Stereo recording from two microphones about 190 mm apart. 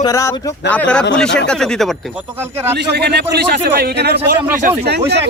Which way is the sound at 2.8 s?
60° right (ahead or behind).